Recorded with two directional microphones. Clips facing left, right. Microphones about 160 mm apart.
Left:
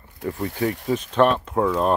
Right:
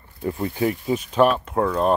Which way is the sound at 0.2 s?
25° right (ahead or behind).